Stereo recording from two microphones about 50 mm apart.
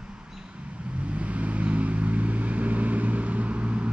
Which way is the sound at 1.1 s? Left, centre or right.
Right.